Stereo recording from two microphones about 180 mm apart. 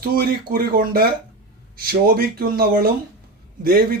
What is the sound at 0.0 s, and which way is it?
Speech, 55° right (ahead or behind).